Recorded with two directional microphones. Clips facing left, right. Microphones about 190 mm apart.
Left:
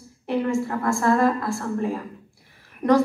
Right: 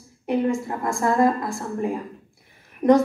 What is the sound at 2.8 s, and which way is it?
Speech, 20° right (ahead or behind).